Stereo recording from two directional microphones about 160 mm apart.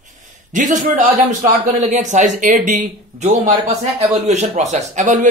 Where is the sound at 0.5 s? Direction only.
50° right (ahead or behind).